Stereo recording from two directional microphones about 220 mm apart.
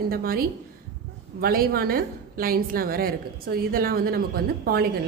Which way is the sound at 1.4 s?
45° right (ahead or behind).